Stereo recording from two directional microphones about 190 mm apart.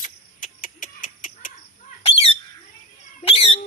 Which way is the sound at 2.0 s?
30° left (ahead or behind).